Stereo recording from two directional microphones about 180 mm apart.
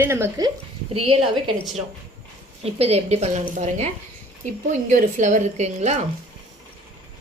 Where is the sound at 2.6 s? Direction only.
35° right (ahead or behind).